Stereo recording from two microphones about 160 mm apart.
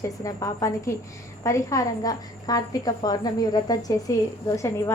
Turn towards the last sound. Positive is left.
turn(degrees=20)  # may be behind; listen again after turning